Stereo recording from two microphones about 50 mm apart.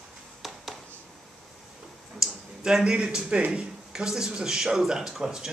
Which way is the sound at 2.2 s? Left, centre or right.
Centre.